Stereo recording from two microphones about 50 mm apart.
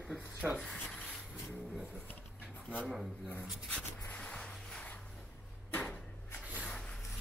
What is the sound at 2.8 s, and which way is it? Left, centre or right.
Speech, centre.